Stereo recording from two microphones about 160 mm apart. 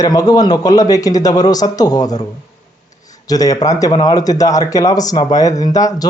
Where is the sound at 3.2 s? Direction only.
20° left (ahead or behind).